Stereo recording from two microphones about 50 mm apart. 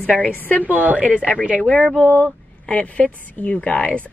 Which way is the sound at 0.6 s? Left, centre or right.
Right.